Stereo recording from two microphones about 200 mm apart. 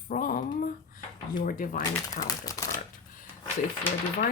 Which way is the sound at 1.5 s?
40° left (ahead or behind).